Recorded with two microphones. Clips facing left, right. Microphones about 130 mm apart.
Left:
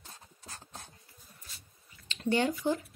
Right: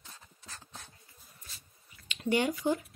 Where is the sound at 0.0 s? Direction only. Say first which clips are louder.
Left 2 dB; 40° left (ahead or behind).